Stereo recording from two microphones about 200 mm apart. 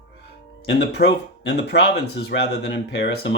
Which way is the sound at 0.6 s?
55° left (ahead or behind).